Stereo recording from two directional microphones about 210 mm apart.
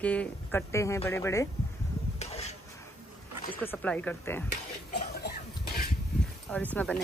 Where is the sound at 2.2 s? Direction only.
30° left (ahead or behind).